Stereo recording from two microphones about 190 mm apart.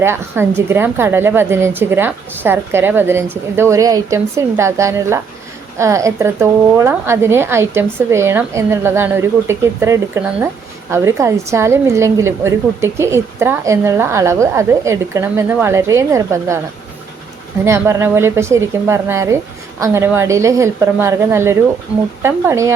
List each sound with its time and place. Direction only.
0.0 s a woman's voice: 15° right (ahead or behind)
17.7 s a woman's voice: 15° right (ahead or behind)